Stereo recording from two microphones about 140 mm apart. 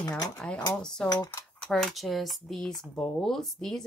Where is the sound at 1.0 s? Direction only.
30° left (ahead or behind).